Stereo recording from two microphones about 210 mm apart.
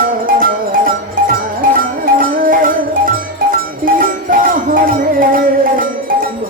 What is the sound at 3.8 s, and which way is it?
Music, 40° right (ahead or behind).